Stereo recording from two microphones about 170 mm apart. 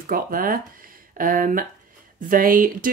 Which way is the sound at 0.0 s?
55° right (ahead or behind).